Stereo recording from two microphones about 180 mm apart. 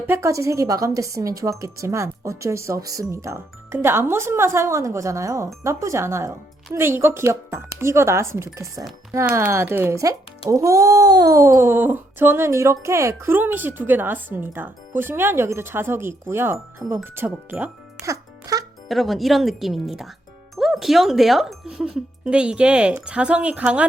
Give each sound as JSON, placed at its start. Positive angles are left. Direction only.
{"t": 0.1, "sound": "a woman's voice", "side_deg": -15}
{"t": 18.9, "sound": "speech", "side_deg": 0}